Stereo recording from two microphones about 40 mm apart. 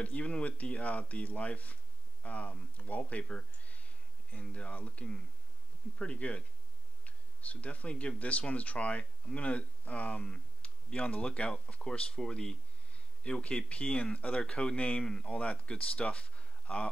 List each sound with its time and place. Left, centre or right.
0.0 s speech: left
14.4 s speech: left
15.0 s speech: centre
15.2 s speech: left
16.0 s a sound: left